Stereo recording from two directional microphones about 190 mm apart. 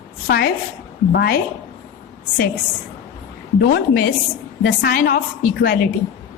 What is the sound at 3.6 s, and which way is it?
A woman's voice, 55° left (ahead or behind).